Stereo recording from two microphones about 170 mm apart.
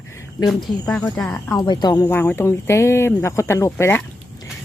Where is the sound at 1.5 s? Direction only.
25° left (ahead or behind).